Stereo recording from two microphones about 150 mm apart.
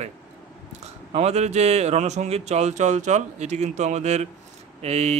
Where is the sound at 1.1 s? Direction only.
45° right (ahead or behind).